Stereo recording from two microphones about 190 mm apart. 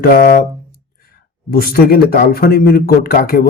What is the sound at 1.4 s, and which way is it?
Speech, 50° left (ahead or behind).